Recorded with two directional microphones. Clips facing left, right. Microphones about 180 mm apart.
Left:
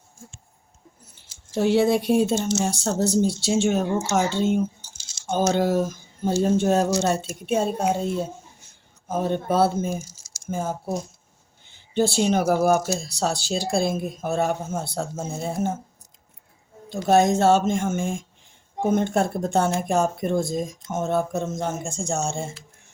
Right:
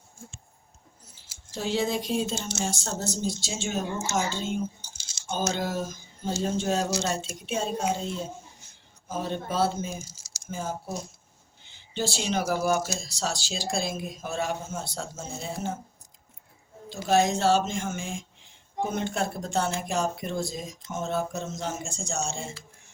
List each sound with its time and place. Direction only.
1.5 s speech: 70° left (ahead or behind); by 15.7 s 50° left (ahead or behind)
17.1 s speech: 50° left (ahead or behind)